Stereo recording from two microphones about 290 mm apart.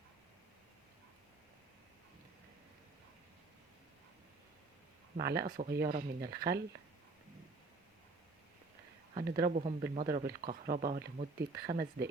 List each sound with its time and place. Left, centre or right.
5.1 s speech: right
9.1 s speech: right